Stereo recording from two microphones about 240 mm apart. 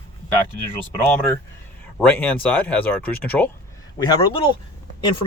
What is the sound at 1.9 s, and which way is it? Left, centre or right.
Speech, centre.